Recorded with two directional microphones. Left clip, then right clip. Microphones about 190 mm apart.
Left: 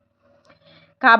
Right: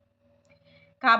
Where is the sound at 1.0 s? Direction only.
40° left (ahead or behind).